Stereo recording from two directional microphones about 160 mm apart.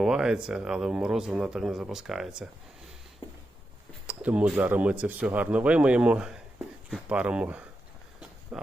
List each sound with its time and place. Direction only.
0.0 s speech: 5° right (ahead or behind)
4.0 s speech: 10° right (ahead or behind)